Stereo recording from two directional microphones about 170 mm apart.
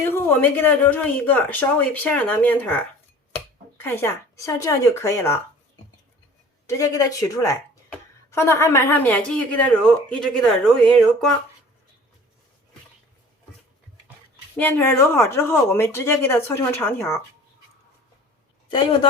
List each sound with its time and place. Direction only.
0.0 s speech: 10° left (ahead or behind)
6.7 s speech: 20° left (ahead or behind)
14.6 s speech: 10° left (ahead or behind)